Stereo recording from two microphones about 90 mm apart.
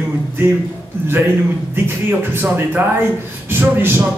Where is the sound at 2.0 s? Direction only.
25° right (ahead or behind).